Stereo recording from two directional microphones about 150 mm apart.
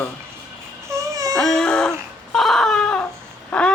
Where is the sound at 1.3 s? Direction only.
5° left (ahead or behind).